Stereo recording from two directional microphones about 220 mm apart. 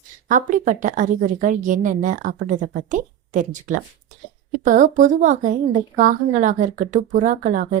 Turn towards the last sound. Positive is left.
turn(degrees=-35)  # may be behind; listen again after turning